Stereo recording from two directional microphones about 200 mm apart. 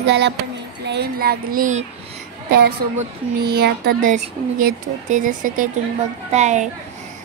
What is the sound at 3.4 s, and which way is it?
Speech, 55° right (ahead or behind).